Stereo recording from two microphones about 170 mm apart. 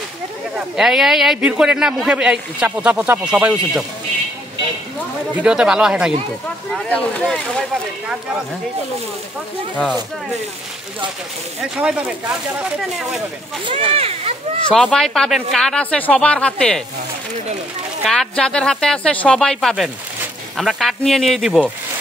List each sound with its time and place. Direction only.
0.7 s speech: centre (ahead or behind)
5.3 s speech: 5° right (ahead or behind)
6.7 s speech: 5° left (ahead or behind)
11.6 s speech: 5° right (ahead or behind)
13.7 s speech: 35° right (ahead or behind)
14.7 s speech: 5° left (ahead or behind)
18.0 s speech: centre (ahead or behind)